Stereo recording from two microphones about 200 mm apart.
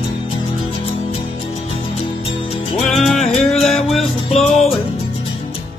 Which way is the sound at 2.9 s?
Centre (ahead or behind).